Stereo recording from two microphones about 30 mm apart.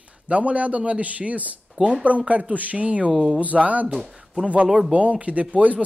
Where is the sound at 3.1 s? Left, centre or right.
Right.